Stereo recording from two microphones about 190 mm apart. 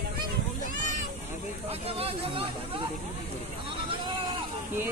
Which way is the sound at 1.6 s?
30° right (ahead or behind).